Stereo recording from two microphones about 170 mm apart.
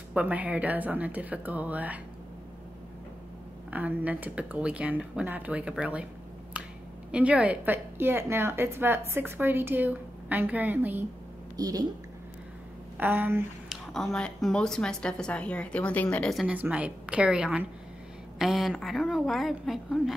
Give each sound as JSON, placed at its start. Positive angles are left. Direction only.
{"t": 0.1, "sound": "a woman's voice", "side_deg": -10}
{"t": 3.7, "sound": "a woman's voice", "side_deg": -10}
{"t": 7.1, "sound": "a woman's voice", "side_deg": -5}
{"t": 11.5, "sound": "a woman's voice", "side_deg": -20}
{"t": 12.9, "sound": "speech", "side_deg": -10}
{"t": 13.9, "sound": "speech", "side_deg": 5}